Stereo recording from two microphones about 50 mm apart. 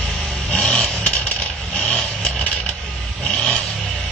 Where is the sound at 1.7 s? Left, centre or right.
Left.